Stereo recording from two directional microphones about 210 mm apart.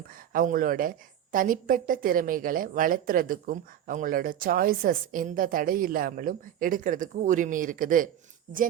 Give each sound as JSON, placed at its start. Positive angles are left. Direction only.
{"t": 0.1, "sound": "a woman's voice", "side_deg": -40}